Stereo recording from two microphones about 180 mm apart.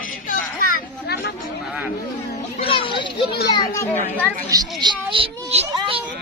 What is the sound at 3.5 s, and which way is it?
Speech, 15° left (ahead or behind).